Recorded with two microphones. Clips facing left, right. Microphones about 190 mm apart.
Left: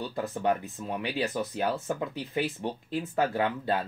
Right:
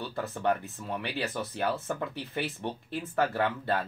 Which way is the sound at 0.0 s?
15° left (ahead or behind).